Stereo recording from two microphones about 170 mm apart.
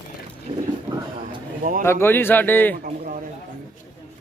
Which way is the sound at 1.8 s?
15° left (ahead or behind).